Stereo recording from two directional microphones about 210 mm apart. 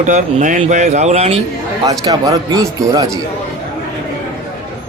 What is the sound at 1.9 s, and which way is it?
A man's voice, 15° right (ahead or behind).